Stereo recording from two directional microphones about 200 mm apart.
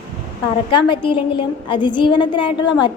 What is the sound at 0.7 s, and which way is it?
A woman's voice, 25° left (ahead or behind).